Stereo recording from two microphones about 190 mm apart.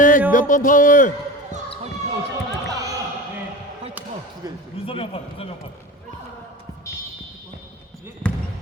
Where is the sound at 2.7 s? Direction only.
20° right (ahead or behind).